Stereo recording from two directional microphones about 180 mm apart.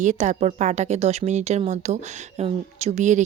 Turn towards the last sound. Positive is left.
turn(degrees=-40)  # may be behind; listen again after turning